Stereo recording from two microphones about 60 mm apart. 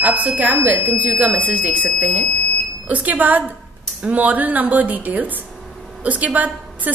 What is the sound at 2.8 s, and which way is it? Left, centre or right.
A woman's voice, right.